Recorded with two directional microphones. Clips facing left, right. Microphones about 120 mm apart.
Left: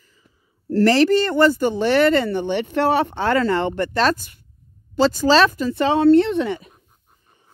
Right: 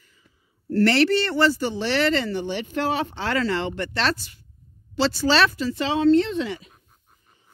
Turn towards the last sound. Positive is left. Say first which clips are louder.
# left 5 dB
turn(degrees=50)  # may be behind; listen again after turning